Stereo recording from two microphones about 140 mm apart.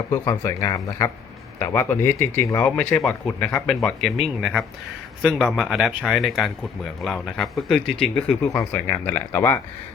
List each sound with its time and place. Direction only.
0.1 s speech: 25° left (ahead or behind); by 8.2 s centre (ahead or behind)
8.5 s speech: 15° left (ahead or behind)